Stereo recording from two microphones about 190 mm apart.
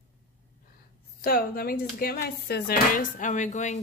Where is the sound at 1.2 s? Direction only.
50° left (ahead or behind).